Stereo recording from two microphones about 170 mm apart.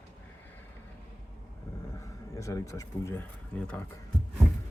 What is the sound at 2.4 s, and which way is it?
Speech, 20° left (ahead or behind).